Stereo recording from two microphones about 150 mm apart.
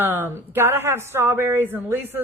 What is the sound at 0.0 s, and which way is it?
A woman's voice, 15° right (ahead or behind).